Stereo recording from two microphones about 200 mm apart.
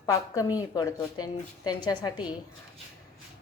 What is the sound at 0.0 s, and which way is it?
A woman's voice, 15° left (ahead or behind).